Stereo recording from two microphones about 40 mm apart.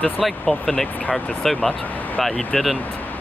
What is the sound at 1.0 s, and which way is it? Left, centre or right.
Speech, left.